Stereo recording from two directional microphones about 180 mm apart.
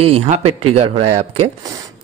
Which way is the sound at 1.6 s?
20° right (ahead or behind).